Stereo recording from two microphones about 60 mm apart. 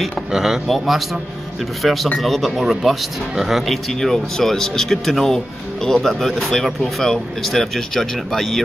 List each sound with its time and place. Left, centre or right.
0.3 s speech: centre